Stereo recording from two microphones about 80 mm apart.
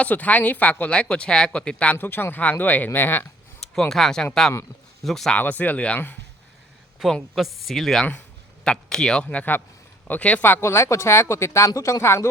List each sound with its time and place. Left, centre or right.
0.0 s speech: centre
3.8 s speech: centre
5.3 s speech: left
7.0 s speech: centre; by 12.3 s left